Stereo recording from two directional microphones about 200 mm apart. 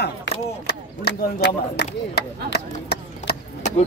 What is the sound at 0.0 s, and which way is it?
Speech, 55° left (ahead or behind).